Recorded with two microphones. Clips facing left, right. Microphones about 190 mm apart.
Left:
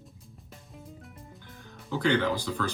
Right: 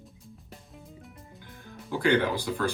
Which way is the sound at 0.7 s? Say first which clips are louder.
Left 3 dB; centre (ahead or behind).